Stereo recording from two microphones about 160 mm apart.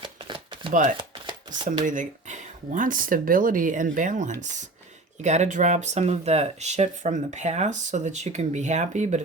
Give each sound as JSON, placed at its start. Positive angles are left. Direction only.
{"t": 0.0, "sound": "shuffling cards", "side_deg": -30}
{"t": 0.7, "sound": "speech", "side_deg": -55}